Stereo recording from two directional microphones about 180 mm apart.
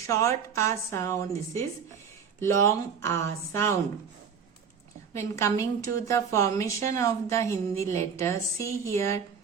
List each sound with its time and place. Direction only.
0.1 s speech: 15° left (ahead or behind)
5.1 s speech: 15° left (ahead or behind)